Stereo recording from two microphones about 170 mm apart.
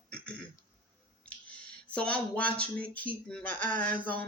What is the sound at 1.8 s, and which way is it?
Speech, 5° left (ahead or behind).